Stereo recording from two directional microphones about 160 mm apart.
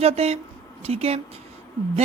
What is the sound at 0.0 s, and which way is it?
Speech, 40° right (ahead or behind).